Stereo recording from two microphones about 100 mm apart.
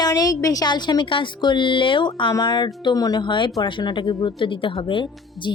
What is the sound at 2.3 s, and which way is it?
A woman's voice, 40° left (ahead or behind).